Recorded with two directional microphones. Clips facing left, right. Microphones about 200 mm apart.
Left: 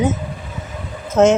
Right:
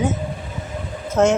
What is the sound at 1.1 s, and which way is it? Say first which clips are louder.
Speech: left 4 dB; 20° left (ahead or behind).